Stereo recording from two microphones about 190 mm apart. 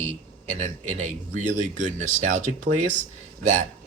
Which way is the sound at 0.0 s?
40° right (ahead or behind).